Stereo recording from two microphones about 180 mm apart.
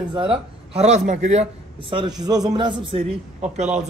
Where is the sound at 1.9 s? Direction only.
25° right (ahead or behind).